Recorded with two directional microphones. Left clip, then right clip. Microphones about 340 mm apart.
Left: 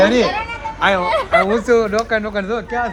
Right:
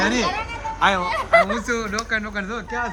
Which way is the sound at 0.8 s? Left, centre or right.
Centre.